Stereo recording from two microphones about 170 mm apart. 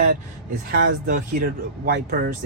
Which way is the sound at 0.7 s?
90° right.